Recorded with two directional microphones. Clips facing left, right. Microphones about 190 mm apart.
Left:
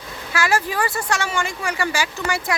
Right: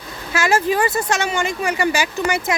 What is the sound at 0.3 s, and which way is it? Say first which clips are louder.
Speech: right 4 dB; 20° right (ahead or behind).